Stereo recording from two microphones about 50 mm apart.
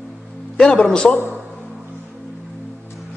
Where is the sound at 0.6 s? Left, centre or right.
Left.